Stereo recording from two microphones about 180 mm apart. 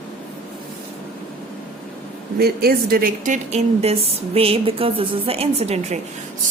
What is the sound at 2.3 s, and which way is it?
A woman's voice, 60° right (ahead or behind).